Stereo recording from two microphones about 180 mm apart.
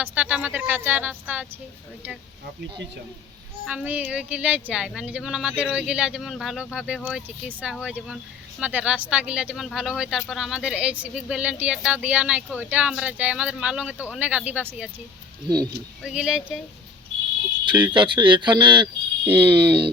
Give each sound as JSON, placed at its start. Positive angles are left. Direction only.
{"t": 0.0, "sound": "speech", "side_deg": -10}
{"t": 3.7, "sound": "speech", "side_deg": -10}
{"t": 15.4, "sound": "speech", "side_deg": -20}
{"t": 16.0, "sound": "speech", "side_deg": -5}
{"t": 17.9, "sound": "speech", "side_deg": -25}